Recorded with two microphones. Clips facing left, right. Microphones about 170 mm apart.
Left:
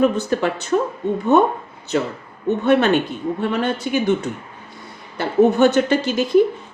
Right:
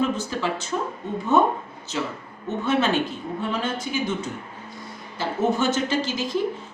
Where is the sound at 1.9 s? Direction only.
60° left (ahead or behind).